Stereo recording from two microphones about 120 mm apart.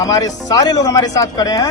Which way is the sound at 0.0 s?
30° left (ahead or behind).